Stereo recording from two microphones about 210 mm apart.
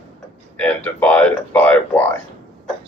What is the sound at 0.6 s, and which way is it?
Speech, 5° left (ahead or behind).